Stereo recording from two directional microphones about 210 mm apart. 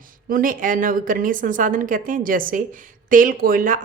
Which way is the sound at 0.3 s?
40° right (ahead or behind).